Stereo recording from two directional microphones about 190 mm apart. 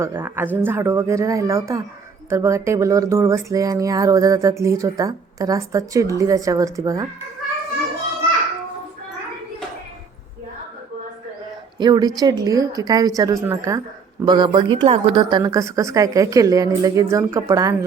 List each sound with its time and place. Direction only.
0.0 s speech: 10° right (ahead or behind)
11.8 s a woman's voice: 20° right (ahead or behind)